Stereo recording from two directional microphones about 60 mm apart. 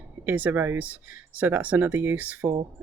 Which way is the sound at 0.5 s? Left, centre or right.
Right.